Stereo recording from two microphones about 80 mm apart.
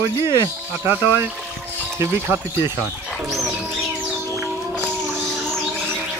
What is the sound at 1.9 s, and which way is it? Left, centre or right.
Speech, right.